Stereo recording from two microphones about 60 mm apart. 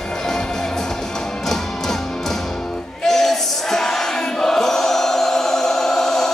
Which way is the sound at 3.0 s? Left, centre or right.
Centre.